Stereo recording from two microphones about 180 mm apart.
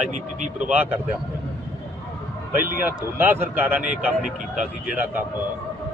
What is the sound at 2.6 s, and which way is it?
A man's voice, 10° right (ahead or behind).